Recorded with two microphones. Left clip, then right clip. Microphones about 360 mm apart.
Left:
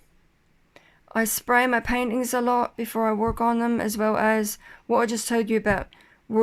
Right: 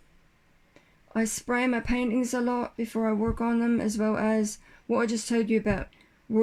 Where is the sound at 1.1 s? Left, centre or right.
Left.